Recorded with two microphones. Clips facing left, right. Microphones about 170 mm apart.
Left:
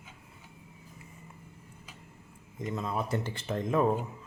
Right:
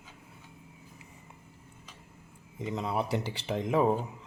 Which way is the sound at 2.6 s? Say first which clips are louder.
Right 1 dB; 15° right (ahead or behind).